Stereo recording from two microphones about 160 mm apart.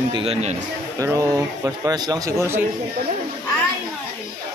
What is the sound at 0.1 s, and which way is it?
Speech, 35° right (ahead or behind).